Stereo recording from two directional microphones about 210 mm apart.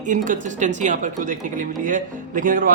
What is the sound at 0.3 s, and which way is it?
Speech, 35° right (ahead or behind).